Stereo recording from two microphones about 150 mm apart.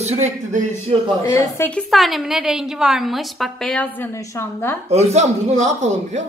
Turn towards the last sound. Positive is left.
turn(degrees=-50)  # may be behind; listen again after turning